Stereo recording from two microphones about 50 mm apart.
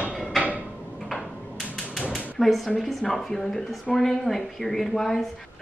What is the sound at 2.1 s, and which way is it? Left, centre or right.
Speech, centre.